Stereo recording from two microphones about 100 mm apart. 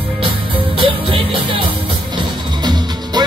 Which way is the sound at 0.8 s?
60° right (ahead or behind).